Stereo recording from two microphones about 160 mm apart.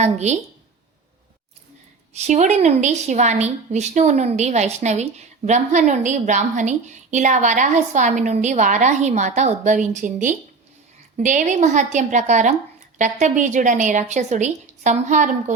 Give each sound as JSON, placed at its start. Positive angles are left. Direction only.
{"t": 0.0, "sound": "a woman's voice", "side_deg": -45}
{"t": 2.1, "sound": "a woman's voice", "side_deg": -45}